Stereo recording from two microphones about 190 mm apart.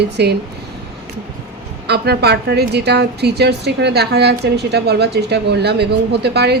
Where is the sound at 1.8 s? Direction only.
60° right (ahead or behind).